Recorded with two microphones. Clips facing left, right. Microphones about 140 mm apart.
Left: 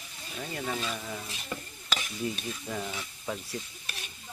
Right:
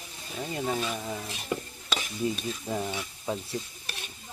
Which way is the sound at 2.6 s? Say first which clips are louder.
Right 5 dB; 20° right (ahead or behind).